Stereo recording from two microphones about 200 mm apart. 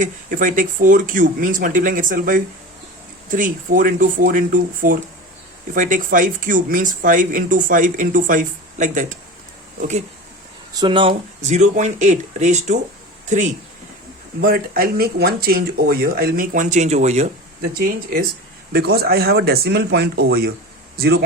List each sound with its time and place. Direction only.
0.0 s speech: 40° right (ahead or behind)
10.8 s speech: 25° right (ahead or behind)
14.4 s speech: 45° right (ahead or behind)
17.7 s speech: 45° right (ahead or behind)